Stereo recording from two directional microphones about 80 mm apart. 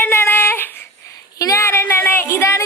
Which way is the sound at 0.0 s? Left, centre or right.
Left.